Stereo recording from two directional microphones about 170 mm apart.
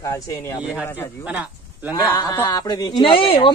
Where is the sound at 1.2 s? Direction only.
10° right (ahead or behind).